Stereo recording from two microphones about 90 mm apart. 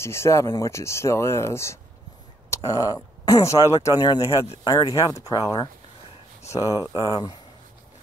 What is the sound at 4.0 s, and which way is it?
Speech, 50° left (ahead or behind).